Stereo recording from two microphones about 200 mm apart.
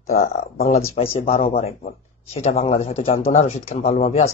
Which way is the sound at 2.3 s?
30° left (ahead or behind).